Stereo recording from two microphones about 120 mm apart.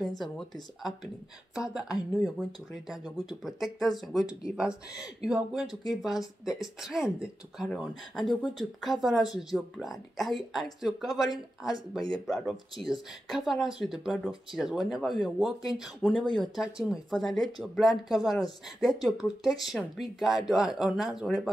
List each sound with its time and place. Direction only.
0.2 s speech: centre (ahead or behind)
12.3 s speech: centre (ahead or behind)